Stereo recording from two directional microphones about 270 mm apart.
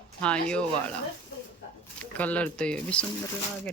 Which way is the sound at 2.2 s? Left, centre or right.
Centre.